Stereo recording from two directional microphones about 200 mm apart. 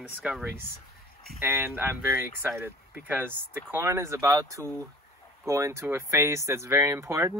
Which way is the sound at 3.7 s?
10° right (ahead or behind).